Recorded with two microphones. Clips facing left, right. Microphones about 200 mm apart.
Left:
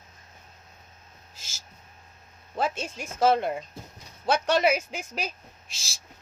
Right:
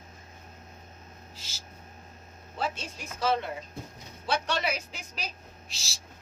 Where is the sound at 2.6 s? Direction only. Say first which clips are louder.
Left 5 dB; 50° left (ahead or behind).